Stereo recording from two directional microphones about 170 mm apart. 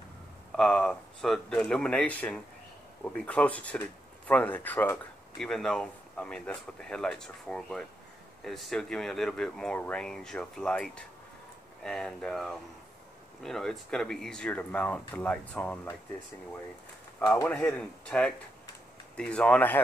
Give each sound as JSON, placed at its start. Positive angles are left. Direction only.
{"t": 0.5, "sound": "speech", "side_deg": 5}
{"t": 17.3, "sound": "speech", "side_deg": 10}